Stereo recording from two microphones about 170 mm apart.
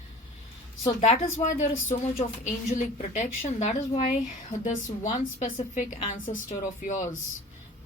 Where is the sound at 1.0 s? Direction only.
40° left (ahead or behind).